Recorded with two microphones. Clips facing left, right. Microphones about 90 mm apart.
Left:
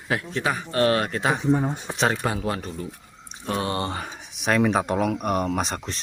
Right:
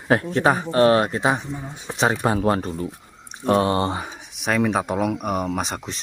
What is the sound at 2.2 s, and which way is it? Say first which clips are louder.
Speech: right 6 dB; 35° right (ahead or behind).